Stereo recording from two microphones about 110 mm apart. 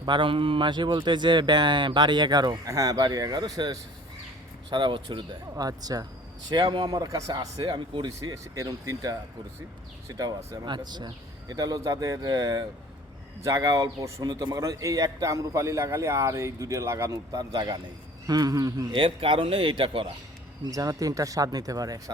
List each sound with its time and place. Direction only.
0.0 s speech: 50° right (ahead or behind)
4.7 s speech: 45° right (ahead or behind)
7.6 s speech: 45° right (ahead or behind)
8.2 s a man's voice: 35° right (ahead or behind)
18.9 s speech: 55° right (ahead or behind)
20.7 s speech: 35° right (ahead or behind)